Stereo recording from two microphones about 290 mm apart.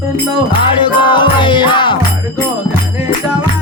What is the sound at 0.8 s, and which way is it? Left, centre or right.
Music, centre.